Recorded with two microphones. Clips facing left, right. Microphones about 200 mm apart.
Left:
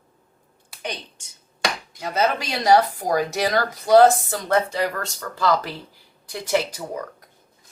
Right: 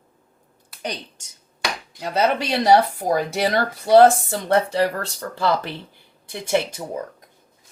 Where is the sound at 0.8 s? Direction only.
40° right (ahead or behind).